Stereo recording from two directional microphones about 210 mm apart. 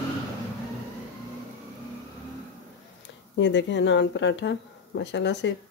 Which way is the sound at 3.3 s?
60° left (ahead or behind).